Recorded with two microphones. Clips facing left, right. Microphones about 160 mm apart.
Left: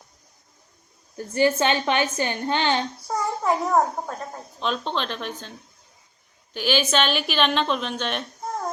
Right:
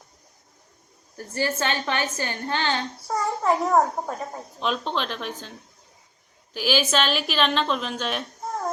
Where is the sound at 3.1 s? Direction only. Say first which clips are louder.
Right 1 dB; centre (ahead or behind).